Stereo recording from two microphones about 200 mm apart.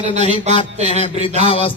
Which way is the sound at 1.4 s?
25° left (ahead or behind).